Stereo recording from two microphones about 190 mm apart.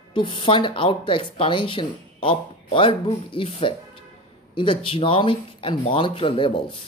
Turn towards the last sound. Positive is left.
turn(degrees=25)  # may be behind; listen again after turning